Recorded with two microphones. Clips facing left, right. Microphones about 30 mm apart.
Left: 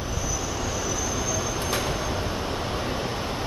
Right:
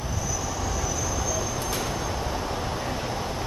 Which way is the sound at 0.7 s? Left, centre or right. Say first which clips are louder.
Left 1 dB; centre.